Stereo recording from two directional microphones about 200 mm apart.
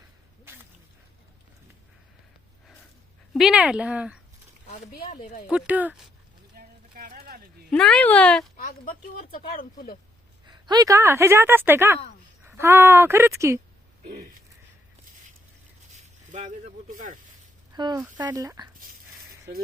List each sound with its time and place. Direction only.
0.5 s a sound: 10° right (ahead or behind)
3.3 s speech: 5° right (ahead or behind)
5.2 s speech: 40° left (ahead or behind)
5.5 s speech: 5° right (ahead or behind)
6.6 s a sound: 45° right (ahead or behind)
7.7 s speech: 5° left (ahead or behind)
8.9 s speech: 45° left (ahead or behind)
10.4 s a woman's voice: 20° right (ahead or behind)
16.3 s speech: 40° right (ahead or behind)
17.7 s speech: 20° right (ahead or behind)